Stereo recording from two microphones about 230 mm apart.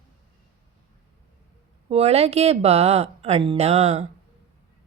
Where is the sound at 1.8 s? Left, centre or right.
Right.